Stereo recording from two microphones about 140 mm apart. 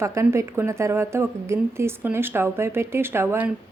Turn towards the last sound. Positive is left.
turn(degrees=-15)  # may be behind; listen again after turning